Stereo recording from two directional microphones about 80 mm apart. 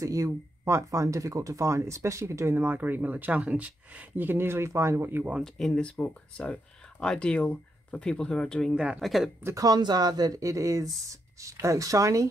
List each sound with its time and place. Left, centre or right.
0.0 s speech: right
5.4 s speech: centre
5.9 s speech: centre
8.7 s speech: centre
9.0 s speech: centre
9.6 s speech: right